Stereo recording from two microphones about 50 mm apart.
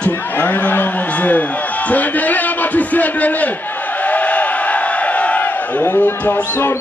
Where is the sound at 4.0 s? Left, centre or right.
Left.